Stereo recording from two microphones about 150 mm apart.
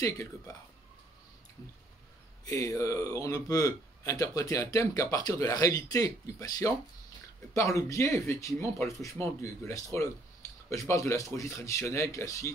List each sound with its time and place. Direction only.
0.0 s a man's voice: 20° left (ahead or behind)
2.4 s a man's voice: 20° left (ahead or behind)